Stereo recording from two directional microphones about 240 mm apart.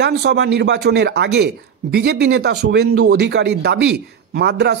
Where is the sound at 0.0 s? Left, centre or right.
Right.